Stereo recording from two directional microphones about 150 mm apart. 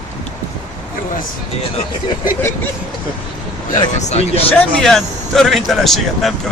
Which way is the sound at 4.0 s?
45° left (ahead or behind).